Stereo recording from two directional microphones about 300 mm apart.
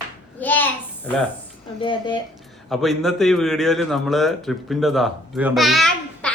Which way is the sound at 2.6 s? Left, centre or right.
Centre.